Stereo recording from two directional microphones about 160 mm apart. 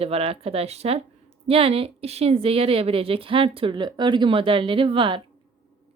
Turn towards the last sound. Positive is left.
turn(degrees=-30)  # may be behind; listen again after turning